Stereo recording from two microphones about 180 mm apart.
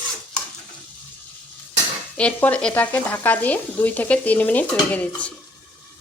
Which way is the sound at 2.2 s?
5° left (ahead or behind).